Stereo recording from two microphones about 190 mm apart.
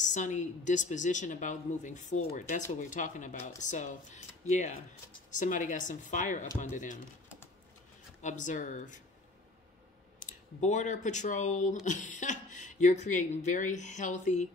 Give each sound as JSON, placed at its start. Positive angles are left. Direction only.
{"t": 0.0, "sound": "a woman's voice", "side_deg": 40}
{"t": 8.2, "sound": "a woman's voice", "side_deg": 40}
{"t": 10.1, "sound": "a woman's voice", "side_deg": 40}